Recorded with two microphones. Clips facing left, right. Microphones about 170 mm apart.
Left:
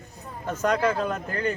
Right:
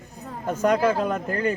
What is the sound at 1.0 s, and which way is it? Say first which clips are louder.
Speech: right 3 dB; 45° right (ahead or behind).